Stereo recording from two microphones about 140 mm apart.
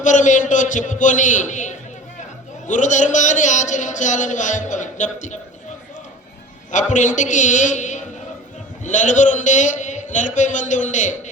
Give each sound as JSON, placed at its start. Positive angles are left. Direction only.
{"t": 0.0, "sound": "speech", "side_deg": 65}
{"t": 6.7, "sound": "speech", "side_deg": 60}